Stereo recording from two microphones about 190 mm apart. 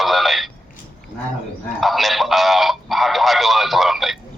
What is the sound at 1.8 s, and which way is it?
Speech, centre (ahead or behind).